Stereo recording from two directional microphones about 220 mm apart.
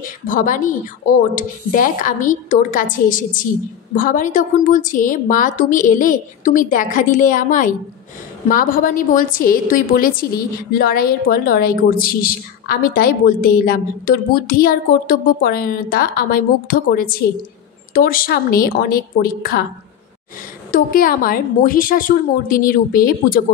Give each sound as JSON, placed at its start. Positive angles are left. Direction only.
{"t": 0.0, "sound": "a woman's voice", "side_deg": 40}
{"t": 20.7, "sound": "a woman's voice", "side_deg": 40}